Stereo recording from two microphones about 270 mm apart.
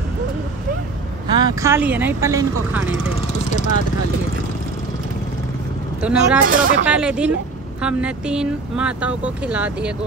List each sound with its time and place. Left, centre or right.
1.2 s speech: centre
3.4 s speech: left
5.9 s speech: centre
6.4 s speech: right
6.9 s speech: centre